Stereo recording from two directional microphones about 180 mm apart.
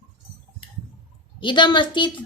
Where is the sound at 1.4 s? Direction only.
25° left (ahead or behind).